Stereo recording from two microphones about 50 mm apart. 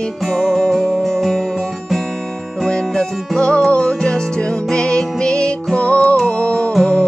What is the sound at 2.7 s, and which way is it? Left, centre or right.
Music, centre.